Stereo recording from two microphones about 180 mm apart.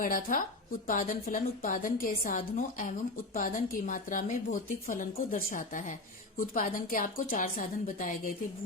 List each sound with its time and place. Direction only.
0.0 s a woman's voice: 50° left (ahead or behind)